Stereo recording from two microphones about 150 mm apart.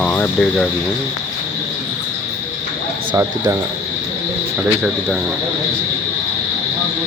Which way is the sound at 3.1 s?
20° right (ahead or behind).